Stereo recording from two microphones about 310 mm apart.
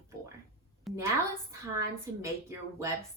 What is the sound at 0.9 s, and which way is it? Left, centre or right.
Speech, centre.